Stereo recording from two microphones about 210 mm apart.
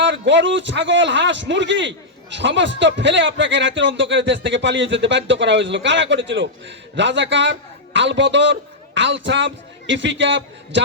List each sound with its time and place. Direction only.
0.0 s a man's voice: 60° right (ahead or behind)